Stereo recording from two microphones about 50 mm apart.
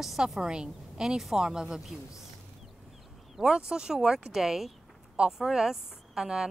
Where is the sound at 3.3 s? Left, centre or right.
Centre.